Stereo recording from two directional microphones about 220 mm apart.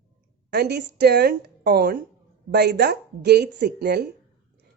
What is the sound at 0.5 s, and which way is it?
Speech, 50° right (ahead or behind).